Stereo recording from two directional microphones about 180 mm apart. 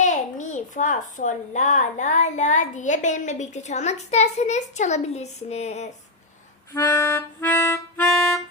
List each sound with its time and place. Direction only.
0.0 s a child's voice: 45° left (ahead or behind)
6.7 s music: 10° left (ahead or behind)
8.0 s music: 5° left (ahead or behind)